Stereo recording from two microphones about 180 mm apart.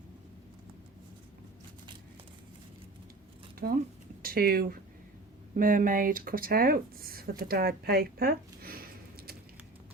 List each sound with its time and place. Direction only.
3.6 s speech: 60° right (ahead or behind)